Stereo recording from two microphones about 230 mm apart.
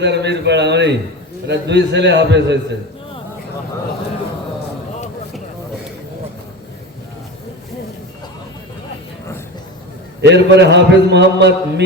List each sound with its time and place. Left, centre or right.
0.0 s a man's voice: right
10.2 s a man's voice: right